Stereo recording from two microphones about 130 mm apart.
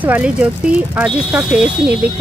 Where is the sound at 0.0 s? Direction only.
10° right (ahead or behind).